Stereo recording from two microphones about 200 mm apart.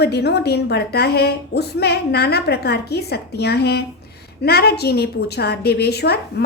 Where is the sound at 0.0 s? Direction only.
55° left (ahead or behind).